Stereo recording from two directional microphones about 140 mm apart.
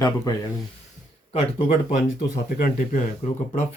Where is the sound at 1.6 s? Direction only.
70° left (ahead or behind).